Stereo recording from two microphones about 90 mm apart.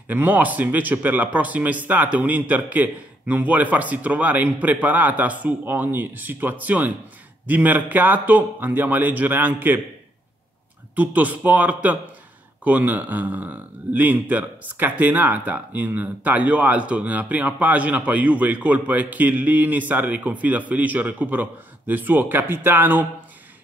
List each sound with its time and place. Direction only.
0.1 s speech: 20° right (ahead or behind)
11.0 s speech: 20° right (ahead or behind)